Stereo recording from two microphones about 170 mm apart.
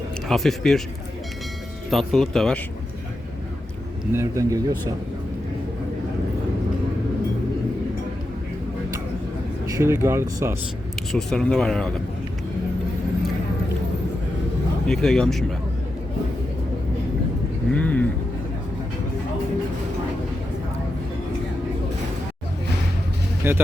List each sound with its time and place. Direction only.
0.3 s speech: centre (ahead or behind)
1.9 s speech: centre (ahead or behind)
4.1 s speech: 15° right (ahead or behind)
9.7 s speech: 15° right (ahead or behind)
11.1 s speech: 5° left (ahead or behind)
14.8 s speech: centre (ahead or behind)
17.7 s speech: 10° left (ahead or behind)
23.4 s speech: 10° right (ahead or behind)